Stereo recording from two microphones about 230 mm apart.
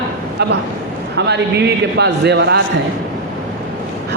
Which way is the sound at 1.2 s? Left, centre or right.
Right.